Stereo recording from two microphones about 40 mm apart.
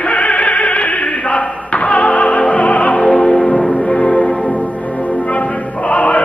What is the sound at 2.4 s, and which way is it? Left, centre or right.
Opera, left.